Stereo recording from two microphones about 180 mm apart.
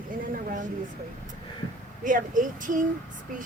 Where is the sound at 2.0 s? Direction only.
45° right (ahead or behind).